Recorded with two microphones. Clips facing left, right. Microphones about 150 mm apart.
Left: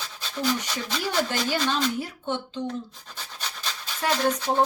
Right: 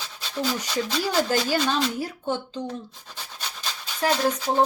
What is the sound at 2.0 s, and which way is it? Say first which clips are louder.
Speech: right 2 dB; 35° right (ahead or behind).